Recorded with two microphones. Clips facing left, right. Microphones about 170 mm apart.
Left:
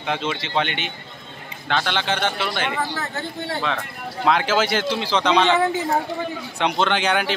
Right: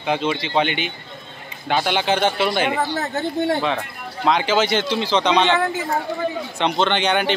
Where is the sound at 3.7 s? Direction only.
Centre (ahead or behind).